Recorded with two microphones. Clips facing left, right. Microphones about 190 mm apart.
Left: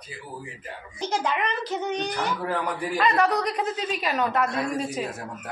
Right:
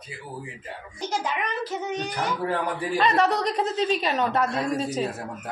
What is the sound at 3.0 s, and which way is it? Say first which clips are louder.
A woman's voice: right 1 dB; 25° right (ahead or behind).